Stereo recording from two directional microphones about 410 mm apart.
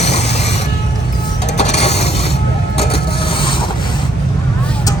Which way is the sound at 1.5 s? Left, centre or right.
Centre.